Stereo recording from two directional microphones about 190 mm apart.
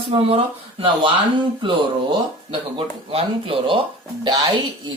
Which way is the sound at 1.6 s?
25° right (ahead or behind).